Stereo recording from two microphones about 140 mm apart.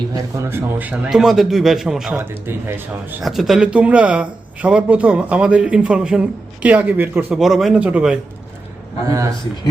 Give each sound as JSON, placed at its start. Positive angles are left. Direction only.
{"t": 0.1, "sound": "a man's voice", "side_deg": -20}
{"t": 2.1, "sound": "speech", "side_deg": -15}
{"t": 3.2, "sound": "speech", "side_deg": 0}
{"t": 7.3, "sound": "a man's voice", "side_deg": 0}
{"t": 9.0, "sound": "a man's voice", "side_deg": -25}